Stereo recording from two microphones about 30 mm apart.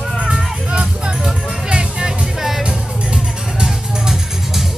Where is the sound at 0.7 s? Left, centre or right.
Right.